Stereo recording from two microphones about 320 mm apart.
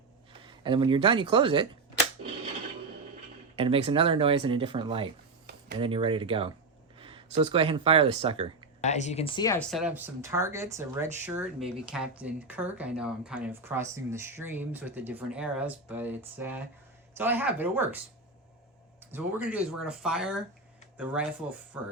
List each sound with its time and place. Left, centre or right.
0.4 s speech: centre
3.5 s speech: centre
8.8 s speech: left; by 18.0 s centre
19.1 s speech: centre